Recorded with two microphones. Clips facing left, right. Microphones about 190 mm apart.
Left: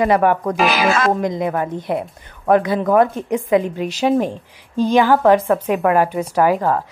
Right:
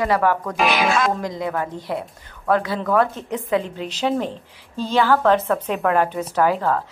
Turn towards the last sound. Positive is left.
turn(degrees=15)  # may be behind; listen again after turning